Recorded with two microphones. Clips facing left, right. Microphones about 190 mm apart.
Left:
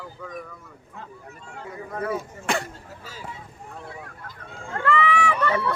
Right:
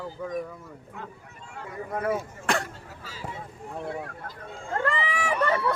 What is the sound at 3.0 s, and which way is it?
Speech, 45° left (ahead or behind).